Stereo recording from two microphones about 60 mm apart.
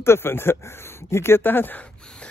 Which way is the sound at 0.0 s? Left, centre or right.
Left.